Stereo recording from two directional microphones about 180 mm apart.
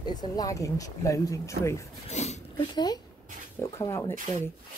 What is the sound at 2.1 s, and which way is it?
Speech, 40° left (ahead or behind).